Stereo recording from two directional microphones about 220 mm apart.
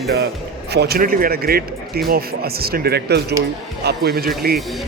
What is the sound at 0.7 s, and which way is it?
Speech, 45° right (ahead or behind).